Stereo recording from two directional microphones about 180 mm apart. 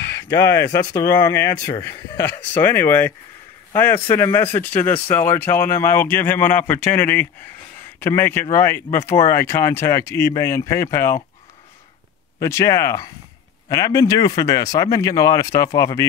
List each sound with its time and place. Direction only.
0.1 s a sound: 75° left (ahead or behind)
0.4 s speech: 15° left (ahead or behind)
12.4 s speech: 15° left (ahead or behind)